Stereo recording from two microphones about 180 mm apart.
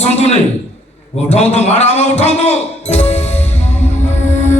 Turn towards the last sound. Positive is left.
turn(degrees=40)  # may be behind; listen again after turning